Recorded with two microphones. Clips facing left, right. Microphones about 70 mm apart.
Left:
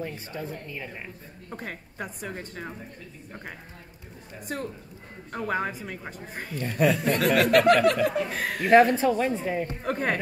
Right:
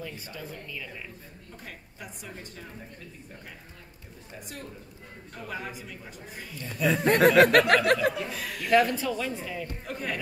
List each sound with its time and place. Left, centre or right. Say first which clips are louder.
0.0 s speech: left 5 dB; left
1.5 s a woman's voice: left 9 dB; left
5.3 s a woman's voice: left 9 dB; left
7.2 s speech: right 4 dB; right
8.3 s a woman's voice: left 5 dB; left